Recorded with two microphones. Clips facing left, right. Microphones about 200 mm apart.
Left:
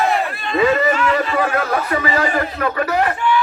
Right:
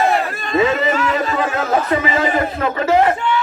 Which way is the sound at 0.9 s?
40° right (ahead or behind).